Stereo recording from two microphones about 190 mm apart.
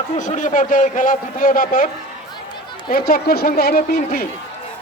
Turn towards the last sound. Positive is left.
turn(degrees=50)  # may be behind; listen again after turning